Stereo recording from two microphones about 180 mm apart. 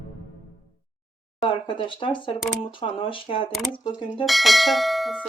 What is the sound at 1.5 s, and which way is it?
Speech, 25° left (ahead or behind).